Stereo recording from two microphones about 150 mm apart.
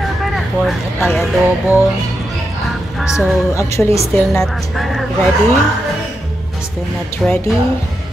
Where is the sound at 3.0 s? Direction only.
5° right (ahead or behind).